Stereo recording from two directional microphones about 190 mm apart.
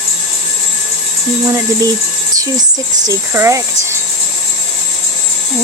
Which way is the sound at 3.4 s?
15° right (ahead or behind).